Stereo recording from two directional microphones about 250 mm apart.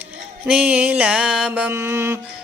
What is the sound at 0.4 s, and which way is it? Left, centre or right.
Mantra, centre.